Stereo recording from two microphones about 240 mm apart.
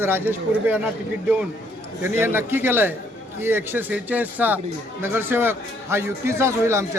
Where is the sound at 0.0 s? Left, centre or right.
Centre.